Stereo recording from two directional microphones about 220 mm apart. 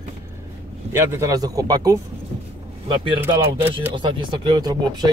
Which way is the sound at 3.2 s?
10° right (ahead or behind).